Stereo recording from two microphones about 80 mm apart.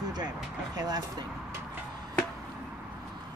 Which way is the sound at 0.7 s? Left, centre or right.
Right.